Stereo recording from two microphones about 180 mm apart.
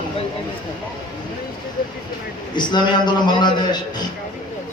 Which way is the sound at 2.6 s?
25° left (ahead or behind).